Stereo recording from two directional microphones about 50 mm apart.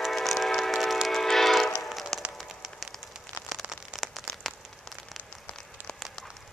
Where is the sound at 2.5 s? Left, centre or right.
Centre.